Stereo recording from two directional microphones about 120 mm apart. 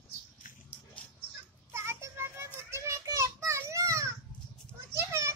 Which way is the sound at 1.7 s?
20° right (ahead or behind).